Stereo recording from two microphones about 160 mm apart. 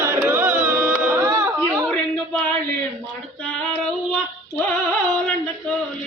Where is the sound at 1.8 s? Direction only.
5° left (ahead or behind).